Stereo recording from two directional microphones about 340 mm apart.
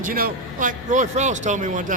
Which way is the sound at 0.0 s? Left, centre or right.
Right.